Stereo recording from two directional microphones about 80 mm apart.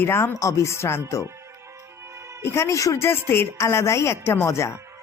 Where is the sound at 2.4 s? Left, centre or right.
Left.